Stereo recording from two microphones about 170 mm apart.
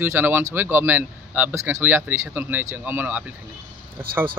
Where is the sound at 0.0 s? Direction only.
15° right (ahead or behind).